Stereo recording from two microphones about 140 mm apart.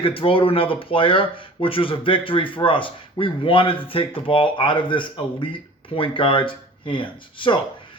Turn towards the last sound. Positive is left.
turn(degrees=35)  # may be behind; listen again after turning